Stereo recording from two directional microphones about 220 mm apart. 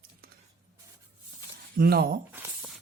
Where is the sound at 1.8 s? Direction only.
45° right (ahead or behind).